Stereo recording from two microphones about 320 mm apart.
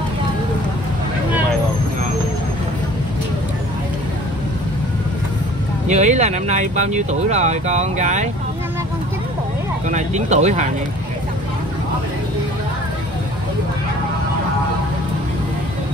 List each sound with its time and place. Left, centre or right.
5.9 s speech: right
9.8 s speech: right